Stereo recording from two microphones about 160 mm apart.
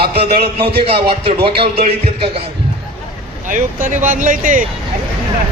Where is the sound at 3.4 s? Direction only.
55° right (ahead or behind).